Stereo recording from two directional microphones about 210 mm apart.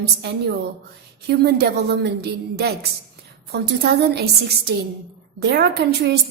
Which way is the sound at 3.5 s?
50° right (ahead or behind).